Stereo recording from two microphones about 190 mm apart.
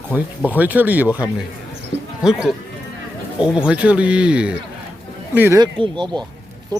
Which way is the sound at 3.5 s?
5° right (ahead or behind).